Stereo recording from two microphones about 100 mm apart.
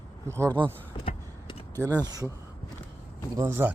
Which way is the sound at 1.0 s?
60° left (ahead or behind).